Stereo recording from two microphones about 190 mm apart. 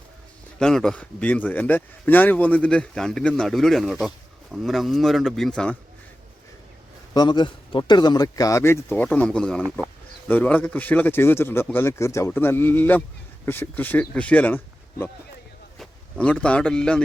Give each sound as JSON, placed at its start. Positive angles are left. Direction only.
{"t": 0.6, "sound": "speech", "side_deg": 5}
{"t": 7.1, "sound": "speech", "side_deg": 20}